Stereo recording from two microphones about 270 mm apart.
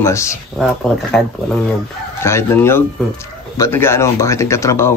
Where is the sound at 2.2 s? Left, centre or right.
Centre.